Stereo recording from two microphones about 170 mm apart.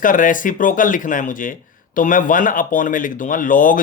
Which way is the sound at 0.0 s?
50° left (ahead or behind).